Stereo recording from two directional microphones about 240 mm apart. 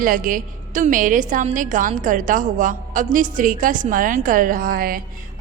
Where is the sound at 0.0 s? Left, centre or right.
Right.